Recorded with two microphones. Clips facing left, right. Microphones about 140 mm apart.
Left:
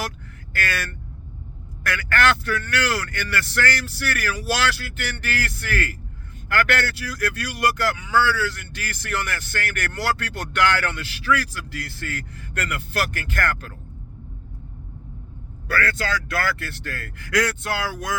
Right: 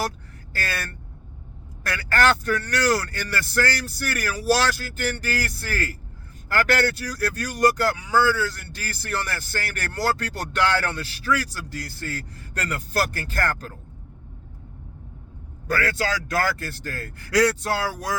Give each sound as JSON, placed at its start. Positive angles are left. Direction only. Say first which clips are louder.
{"t": 0.5, "sound": "speech", "louder": "left 3 dB", "side_deg": -35}
{"t": 15.6, "sound": "a man's voice", "louder": "right 1 dB", "side_deg": -40}